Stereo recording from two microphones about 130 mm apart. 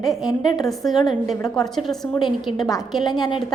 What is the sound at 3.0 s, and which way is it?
Speech, 35° left (ahead or behind).